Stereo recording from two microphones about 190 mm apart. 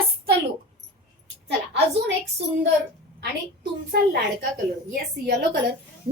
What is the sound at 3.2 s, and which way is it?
A woman's voice, 60° right (ahead or behind).